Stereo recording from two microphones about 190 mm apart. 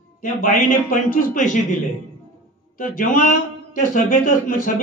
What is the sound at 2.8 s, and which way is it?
A man's voice, 45° left (ahead or behind).